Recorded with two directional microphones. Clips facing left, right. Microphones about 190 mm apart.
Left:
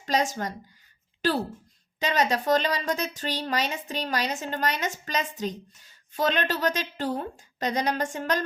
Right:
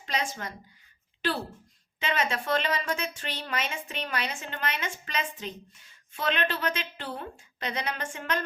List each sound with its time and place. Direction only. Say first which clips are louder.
0.0 s speech: left 6 dB; 40° left (ahead or behind)
2.0 s speech: left 5 dB; 40° left (ahead or behind)